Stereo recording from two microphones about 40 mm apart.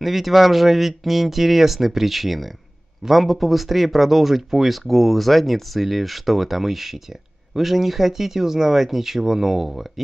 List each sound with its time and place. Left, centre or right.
0.0 s speech: centre